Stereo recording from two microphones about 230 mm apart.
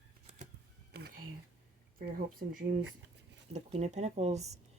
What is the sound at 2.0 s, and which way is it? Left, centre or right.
Speech, right.